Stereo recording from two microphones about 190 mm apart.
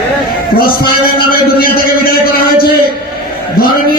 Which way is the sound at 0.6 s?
50° left (ahead or behind).